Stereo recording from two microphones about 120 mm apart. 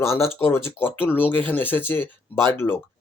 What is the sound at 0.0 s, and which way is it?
Speech, 20° left (ahead or behind).